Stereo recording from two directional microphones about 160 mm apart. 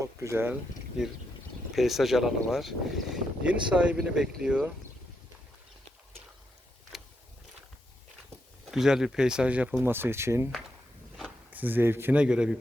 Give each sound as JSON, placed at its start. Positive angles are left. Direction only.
{"t": 0.0, "sound": "a sound", "side_deg": -20}
{"t": 1.0, "sound": "speech", "side_deg": -5}
{"t": 6.9, "sound": "vehicle", "side_deg": 0}
{"t": 8.7, "sound": "speech", "side_deg": -5}